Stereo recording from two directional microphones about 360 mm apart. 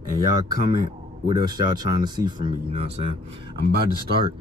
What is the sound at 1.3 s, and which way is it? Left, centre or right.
Speech, centre.